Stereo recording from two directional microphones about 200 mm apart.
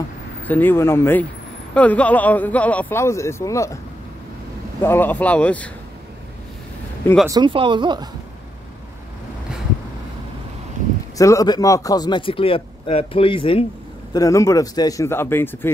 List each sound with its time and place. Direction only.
0.5 s a man's voice: 10° left (ahead or behind)
4.8 s a man's voice: 10° left (ahead or behind)
7.2 s speech: 20° right (ahead or behind)
11.1 s speech: 15° left (ahead or behind)
14.1 s a man's voice: 15° left (ahead or behind)